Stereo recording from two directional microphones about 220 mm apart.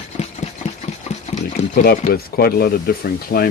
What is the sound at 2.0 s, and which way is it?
Speech, 45° left (ahead or behind).